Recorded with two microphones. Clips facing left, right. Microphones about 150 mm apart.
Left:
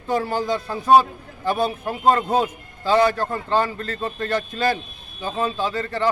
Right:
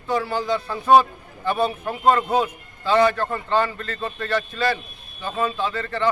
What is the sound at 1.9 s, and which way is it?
A man's voice, 30° left (ahead or behind).